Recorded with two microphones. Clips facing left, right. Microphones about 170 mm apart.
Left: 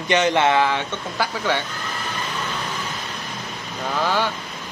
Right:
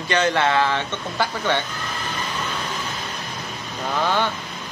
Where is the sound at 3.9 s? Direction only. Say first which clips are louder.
Even; 5° left (ahead or behind).